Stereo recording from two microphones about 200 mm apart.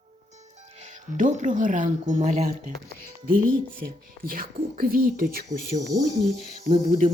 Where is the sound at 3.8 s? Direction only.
45° right (ahead or behind).